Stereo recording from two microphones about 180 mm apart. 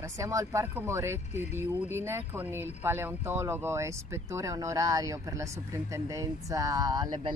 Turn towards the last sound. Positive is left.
turn(degrees=-25)  # may be behind; listen again after turning